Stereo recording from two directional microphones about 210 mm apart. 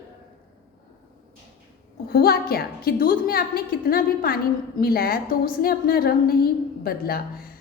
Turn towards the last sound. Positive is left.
turn(degrees=45)  # may be behind; listen again after turning